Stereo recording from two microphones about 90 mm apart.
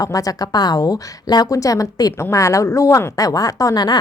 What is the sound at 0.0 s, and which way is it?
A woman's voice, 40° left (ahead or behind).